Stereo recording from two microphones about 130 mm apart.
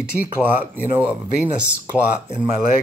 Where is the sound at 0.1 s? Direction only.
10° right (ahead or behind).